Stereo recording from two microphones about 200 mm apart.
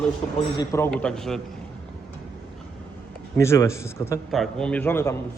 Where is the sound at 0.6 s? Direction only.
15° left (ahead or behind).